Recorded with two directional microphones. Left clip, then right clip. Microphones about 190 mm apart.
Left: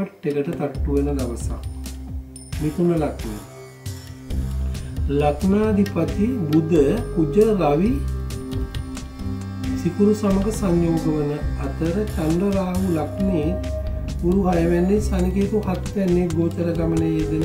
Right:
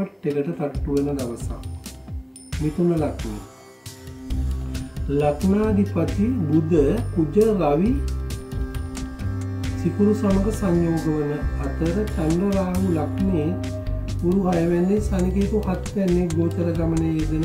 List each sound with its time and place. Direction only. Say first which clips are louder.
0.0 s speech: left 1 dB; centre (ahead or behind)
2.9 s speech: left 2 dB; centre (ahead or behind)
5.1 s speech: left 1 dB; centre (ahead or behind)
9.6 s speech: left 2 dB; centre (ahead or behind)